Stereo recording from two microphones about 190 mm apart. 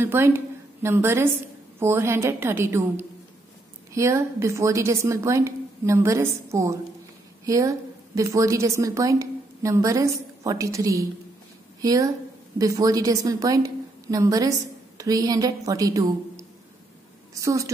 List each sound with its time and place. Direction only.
0.0 s a woman's voice: 10° right (ahead or behind)